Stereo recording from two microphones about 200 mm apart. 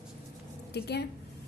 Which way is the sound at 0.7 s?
55° left (ahead or behind).